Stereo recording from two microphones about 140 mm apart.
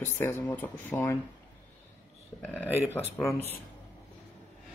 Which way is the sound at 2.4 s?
10° left (ahead or behind).